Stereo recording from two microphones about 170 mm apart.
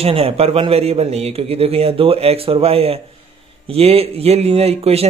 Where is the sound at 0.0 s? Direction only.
35° right (ahead or behind).